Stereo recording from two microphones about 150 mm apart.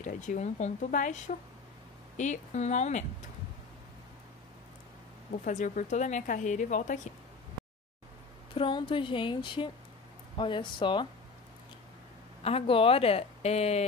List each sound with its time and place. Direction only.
0.0 s speech: 55° left (ahead or behind)
5.4 s a woman's voice: 55° left (ahead or behind)
8.5 s speech: 35° left (ahead or behind)
12.4 s speech: 40° left (ahead or behind)